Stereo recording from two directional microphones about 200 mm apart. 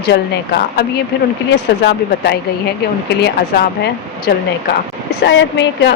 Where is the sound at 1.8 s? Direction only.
55° left (ahead or behind).